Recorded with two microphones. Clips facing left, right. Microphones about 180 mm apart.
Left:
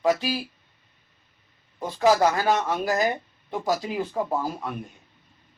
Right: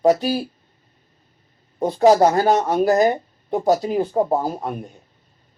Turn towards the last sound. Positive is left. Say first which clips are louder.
# right 5 dB
turn(degrees=-40)  # may be behind; listen again after turning